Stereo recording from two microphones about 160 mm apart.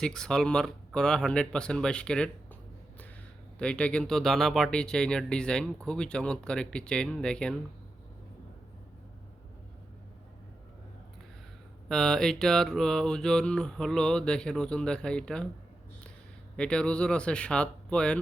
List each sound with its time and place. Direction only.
0.0 s speech: 5° left (ahead or behind)
3.6 s speech: 5° left (ahead or behind)
11.9 s speech: 5° left (ahead or behind)
16.6 s speech: 5° left (ahead or behind)